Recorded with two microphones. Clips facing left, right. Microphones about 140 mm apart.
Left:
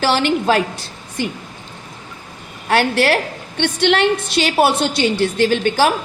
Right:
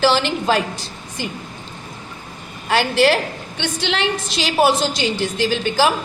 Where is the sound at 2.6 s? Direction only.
60° left (ahead or behind).